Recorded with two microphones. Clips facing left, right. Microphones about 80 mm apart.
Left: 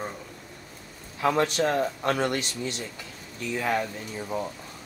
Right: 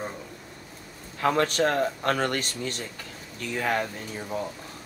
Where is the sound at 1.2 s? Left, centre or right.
Right.